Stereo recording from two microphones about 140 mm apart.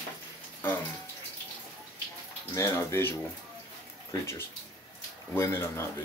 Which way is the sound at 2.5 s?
20° left (ahead or behind).